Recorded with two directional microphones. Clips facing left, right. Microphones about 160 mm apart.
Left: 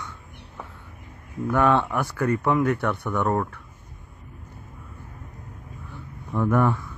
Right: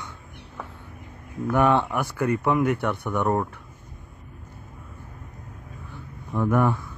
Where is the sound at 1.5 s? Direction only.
15° right (ahead or behind).